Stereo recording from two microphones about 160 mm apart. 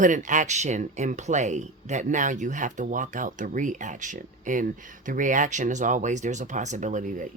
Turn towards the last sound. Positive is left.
turn(degrees=-55)  # may be behind; listen again after turning